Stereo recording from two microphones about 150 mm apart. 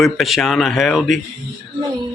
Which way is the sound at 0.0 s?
Centre (ahead or behind).